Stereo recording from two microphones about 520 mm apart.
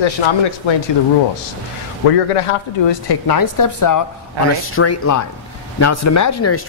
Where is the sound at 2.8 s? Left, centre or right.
Left.